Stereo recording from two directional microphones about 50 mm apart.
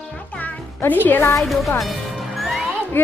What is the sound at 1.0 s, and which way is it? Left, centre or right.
Speech, left.